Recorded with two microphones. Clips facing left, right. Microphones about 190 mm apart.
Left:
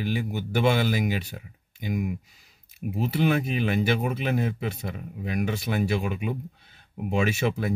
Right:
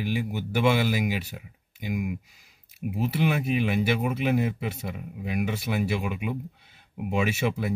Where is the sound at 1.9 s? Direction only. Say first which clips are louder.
Left 1 dB; 40° left (ahead or behind).